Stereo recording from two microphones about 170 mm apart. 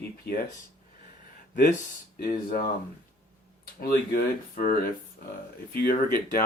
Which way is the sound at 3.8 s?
65° left (ahead or behind).